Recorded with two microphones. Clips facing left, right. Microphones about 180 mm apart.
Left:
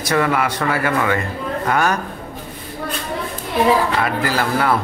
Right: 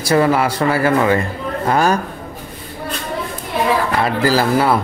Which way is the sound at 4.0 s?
30° right (ahead or behind).